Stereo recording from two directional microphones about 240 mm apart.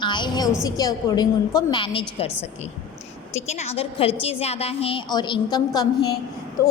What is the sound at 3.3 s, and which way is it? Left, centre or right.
A woman's voice, left.